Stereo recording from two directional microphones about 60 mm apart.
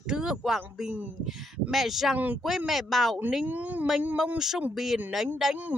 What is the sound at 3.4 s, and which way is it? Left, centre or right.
Speech, right.